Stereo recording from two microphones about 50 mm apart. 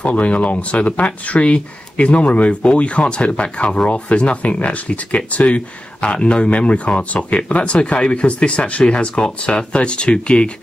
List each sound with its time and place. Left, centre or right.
0.0 s speech: left